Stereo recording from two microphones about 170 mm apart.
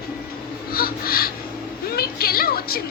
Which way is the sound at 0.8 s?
60° left (ahead or behind).